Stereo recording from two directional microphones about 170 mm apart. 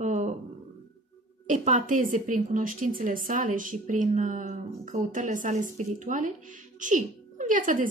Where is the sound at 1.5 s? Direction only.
45° right (ahead or behind).